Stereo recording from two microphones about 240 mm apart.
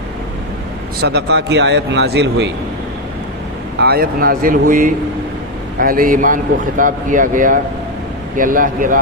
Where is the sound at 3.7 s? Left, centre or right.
Right.